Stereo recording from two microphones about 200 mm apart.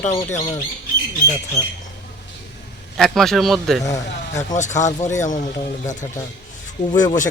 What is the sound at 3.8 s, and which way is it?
Speech, 15° left (ahead or behind).